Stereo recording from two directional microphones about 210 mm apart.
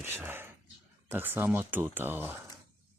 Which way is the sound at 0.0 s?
10° right (ahead or behind).